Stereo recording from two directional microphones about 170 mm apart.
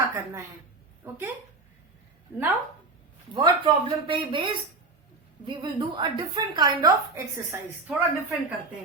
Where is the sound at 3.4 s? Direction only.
30° right (ahead or behind).